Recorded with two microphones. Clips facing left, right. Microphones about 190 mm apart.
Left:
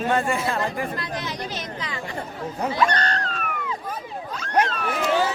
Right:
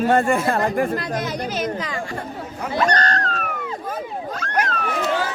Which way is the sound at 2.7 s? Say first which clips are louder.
Right 5 dB; 40° right (ahead or behind).